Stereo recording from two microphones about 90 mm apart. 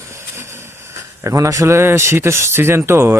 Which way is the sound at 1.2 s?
35° right (ahead or behind).